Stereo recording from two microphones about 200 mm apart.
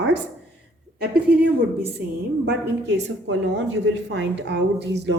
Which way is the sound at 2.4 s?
60° right (ahead or behind).